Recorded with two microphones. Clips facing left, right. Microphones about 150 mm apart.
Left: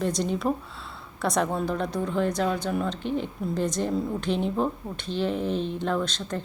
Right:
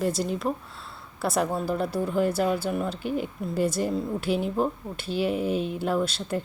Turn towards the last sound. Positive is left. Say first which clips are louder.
# right 2 dB
turn(degrees=-10)  # may be behind; listen again after turning